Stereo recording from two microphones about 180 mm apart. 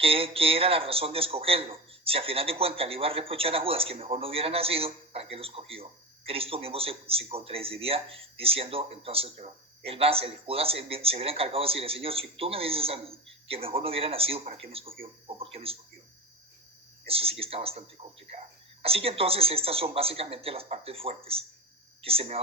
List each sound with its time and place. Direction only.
0.0 s speech: 30° right (ahead or behind)
17.1 s speech: 30° right (ahead or behind)